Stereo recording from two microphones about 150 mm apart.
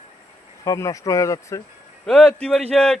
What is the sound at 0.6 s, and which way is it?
A man's voice, 20° left (ahead or behind).